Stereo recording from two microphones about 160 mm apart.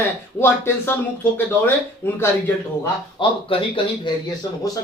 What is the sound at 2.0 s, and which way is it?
Speech, 15° left (ahead or behind).